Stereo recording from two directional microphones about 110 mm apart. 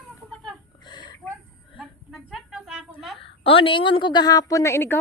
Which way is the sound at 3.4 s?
55° left (ahead or behind).